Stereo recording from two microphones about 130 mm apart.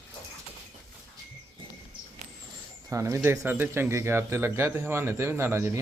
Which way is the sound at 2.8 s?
20° right (ahead or behind).